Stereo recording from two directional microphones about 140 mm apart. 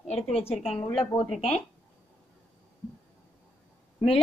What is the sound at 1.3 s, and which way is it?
Speech, 45° left (ahead or behind).